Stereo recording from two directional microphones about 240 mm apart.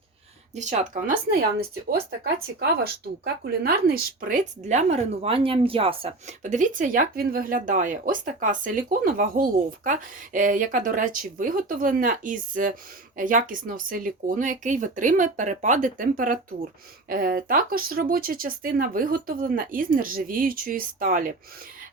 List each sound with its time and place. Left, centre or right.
0.5 s speech: right